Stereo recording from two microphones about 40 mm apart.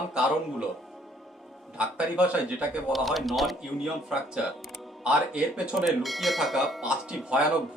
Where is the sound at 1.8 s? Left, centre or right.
Right.